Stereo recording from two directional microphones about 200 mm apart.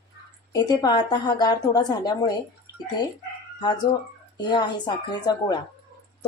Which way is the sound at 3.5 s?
20° left (ahead or behind).